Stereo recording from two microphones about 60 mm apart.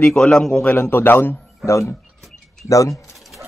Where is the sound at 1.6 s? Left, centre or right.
Left.